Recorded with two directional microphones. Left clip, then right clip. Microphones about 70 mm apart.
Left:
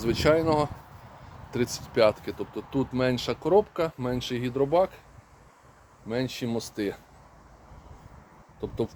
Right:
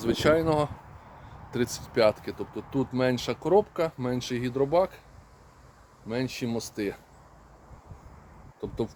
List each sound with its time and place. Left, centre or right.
0.0 s speech: right
0.4 s speech: right
6.1 s speech: centre
8.6 s speech: right